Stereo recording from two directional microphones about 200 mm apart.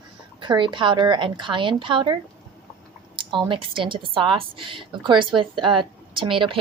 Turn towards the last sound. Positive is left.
turn(degrees=-25)  # may be behind; listen again after turning